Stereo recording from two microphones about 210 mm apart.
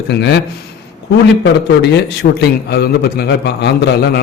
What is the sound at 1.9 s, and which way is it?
A man's voice, 50° left (ahead or behind).